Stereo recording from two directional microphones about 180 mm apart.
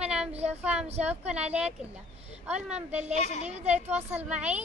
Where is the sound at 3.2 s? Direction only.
40° left (ahead or behind).